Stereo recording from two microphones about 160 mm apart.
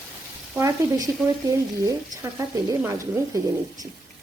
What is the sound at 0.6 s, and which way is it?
Speech, 20° right (ahead or behind).